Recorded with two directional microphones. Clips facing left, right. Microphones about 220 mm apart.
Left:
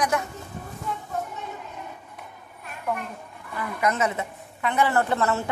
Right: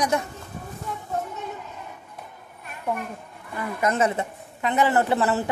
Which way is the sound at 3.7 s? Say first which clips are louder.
Right 2 dB; 30° right (ahead or behind).